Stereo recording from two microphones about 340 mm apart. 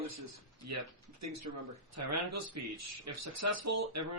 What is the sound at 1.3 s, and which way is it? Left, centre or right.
Speech, right.